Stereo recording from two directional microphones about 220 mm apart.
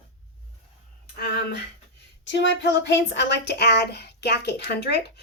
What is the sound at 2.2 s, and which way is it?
Speech, 55° left (ahead or behind).